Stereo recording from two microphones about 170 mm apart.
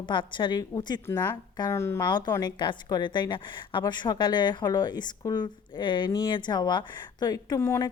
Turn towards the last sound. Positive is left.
turn(degrees=20)  # may be behind; listen again after turning